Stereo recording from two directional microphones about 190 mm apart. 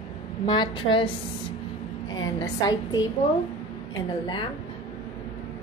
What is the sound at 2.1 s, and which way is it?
Speech, 20° left (ahead or behind).